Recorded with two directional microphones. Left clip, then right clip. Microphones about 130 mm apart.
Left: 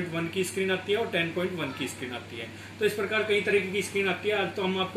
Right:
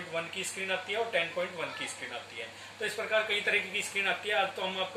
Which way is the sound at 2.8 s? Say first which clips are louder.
Left 4 dB; centre (ahead or behind).